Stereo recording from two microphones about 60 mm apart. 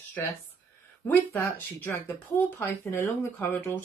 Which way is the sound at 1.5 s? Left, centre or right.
Left.